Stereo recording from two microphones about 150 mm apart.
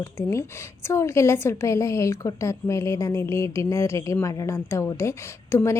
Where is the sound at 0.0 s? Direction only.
20° left (ahead or behind).